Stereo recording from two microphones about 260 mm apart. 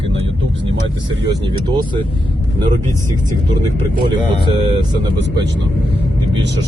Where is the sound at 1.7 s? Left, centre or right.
Centre.